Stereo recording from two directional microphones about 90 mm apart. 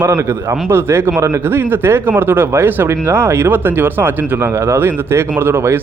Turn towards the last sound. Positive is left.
turn(degrees=-25)  # may be behind; listen again after turning